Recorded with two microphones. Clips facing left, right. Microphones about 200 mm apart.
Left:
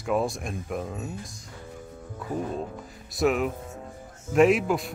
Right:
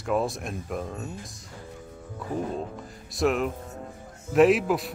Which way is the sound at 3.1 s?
Centre (ahead or behind).